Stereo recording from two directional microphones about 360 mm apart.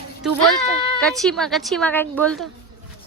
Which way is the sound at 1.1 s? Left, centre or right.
Centre.